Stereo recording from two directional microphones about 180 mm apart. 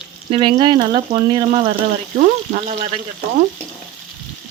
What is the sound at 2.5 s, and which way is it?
Speech, 35° right (ahead or behind).